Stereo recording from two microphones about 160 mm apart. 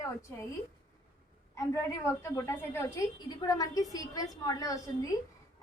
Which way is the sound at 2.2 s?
15° left (ahead or behind).